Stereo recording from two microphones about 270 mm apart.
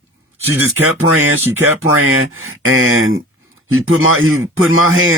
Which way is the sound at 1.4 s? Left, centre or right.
Centre.